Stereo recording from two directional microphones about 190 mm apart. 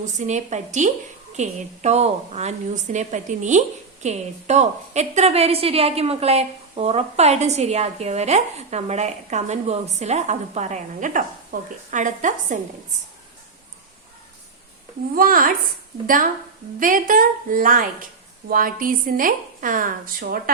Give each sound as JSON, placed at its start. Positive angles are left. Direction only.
{"t": 0.0, "sound": "a woman's voice", "side_deg": -40}
{"t": 15.1, "sound": "speech", "side_deg": -50}